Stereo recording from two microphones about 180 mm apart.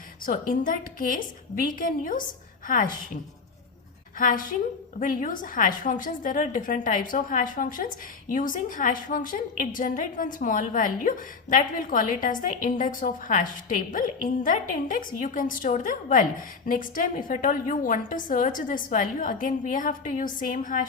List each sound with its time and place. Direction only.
0.3 s a woman's voice: 50° left (ahead or behind)
4.2 s a woman's voice: 50° left (ahead or behind)